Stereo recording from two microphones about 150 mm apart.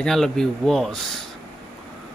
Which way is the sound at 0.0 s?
5° left (ahead or behind).